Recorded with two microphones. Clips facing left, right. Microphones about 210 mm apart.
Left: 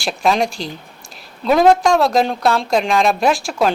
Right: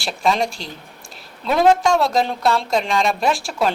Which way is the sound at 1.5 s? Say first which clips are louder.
Left 3 dB; 50° left (ahead or behind).